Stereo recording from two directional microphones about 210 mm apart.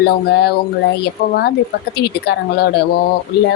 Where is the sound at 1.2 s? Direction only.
50° left (ahead or behind).